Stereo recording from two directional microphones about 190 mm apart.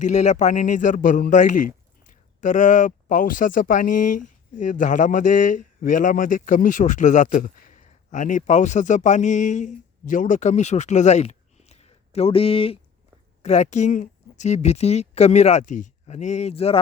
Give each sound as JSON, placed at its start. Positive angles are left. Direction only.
{"t": 0.0, "sound": "a man's voice", "side_deg": 40}